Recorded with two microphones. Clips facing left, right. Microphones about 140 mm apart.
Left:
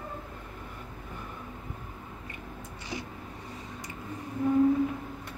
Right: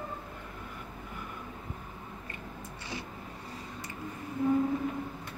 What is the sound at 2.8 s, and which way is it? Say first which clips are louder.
Vehicle: left 3 dB; 20° left (ahead or behind).